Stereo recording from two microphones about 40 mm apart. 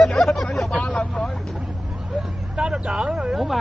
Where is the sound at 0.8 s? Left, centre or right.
Left.